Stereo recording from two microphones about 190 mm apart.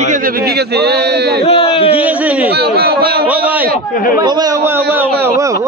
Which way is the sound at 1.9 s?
10° right (ahead or behind).